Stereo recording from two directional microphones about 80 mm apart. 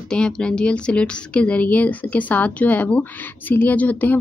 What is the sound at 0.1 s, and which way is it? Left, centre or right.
Speech, centre.